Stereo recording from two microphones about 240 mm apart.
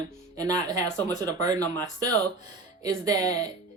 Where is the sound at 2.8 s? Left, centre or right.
Centre.